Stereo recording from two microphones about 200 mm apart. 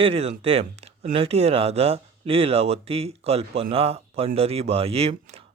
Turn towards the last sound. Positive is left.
turn(degrees=-30)  # may be behind; listen again after turning